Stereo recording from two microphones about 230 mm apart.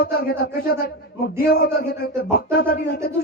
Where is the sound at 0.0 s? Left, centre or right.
Left.